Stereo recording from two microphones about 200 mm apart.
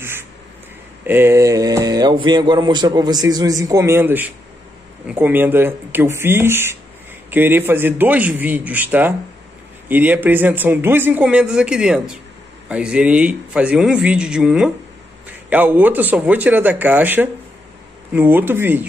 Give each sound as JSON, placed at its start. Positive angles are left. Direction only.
{"t": 1.0, "sound": "a man's voice", "side_deg": -10}